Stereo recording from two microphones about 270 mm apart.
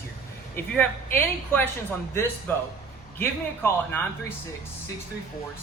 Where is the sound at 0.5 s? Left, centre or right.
Centre.